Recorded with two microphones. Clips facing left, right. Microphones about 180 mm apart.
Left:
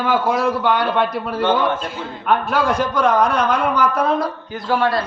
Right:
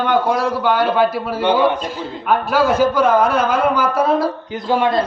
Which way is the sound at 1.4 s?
15° right (ahead or behind).